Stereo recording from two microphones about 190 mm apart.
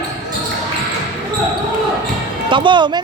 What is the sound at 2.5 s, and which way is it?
Speech, 25° right (ahead or behind).